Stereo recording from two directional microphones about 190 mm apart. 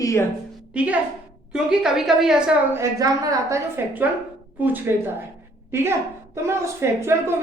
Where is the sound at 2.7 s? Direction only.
15° right (ahead or behind).